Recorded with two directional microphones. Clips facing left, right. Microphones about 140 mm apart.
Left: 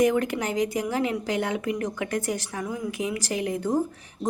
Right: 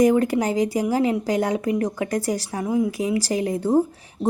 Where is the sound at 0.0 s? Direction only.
35° right (ahead or behind).